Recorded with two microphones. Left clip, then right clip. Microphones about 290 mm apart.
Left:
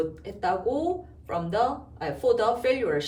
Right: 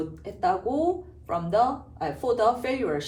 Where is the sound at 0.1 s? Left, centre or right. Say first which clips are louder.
Right 2 dB; centre.